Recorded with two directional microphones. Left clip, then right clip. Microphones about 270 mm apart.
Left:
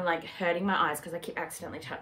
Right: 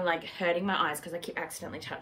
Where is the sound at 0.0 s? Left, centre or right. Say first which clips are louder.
Even; centre.